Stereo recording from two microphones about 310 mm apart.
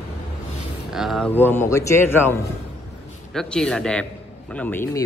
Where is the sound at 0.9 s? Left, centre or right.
Centre.